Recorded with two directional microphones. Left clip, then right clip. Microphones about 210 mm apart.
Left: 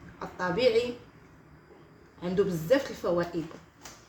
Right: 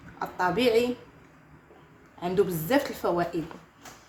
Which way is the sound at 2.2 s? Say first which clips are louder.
Right 3 dB; 45° right (ahead or behind).